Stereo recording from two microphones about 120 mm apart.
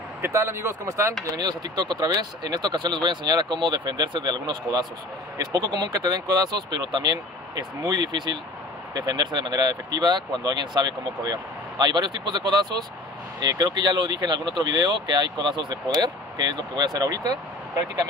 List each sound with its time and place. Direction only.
0.2 s speech: 25° right (ahead or behind)
1.3 s speech: 35° right (ahead or behind)